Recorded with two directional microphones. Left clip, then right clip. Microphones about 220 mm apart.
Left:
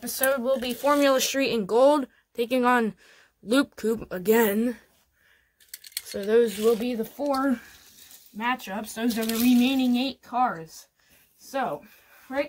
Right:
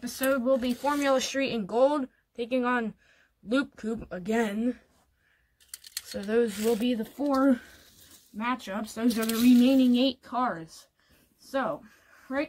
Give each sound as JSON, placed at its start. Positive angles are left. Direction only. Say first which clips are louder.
{"t": 0.0, "sound": "speech", "louder": "left 2 dB", "side_deg": 45}
{"t": 5.8, "sound": "mechanisms", "louder": "left 3 dB", "side_deg": 0}
{"t": 6.1, "sound": "speech", "louder": "left 5 dB", "side_deg": 40}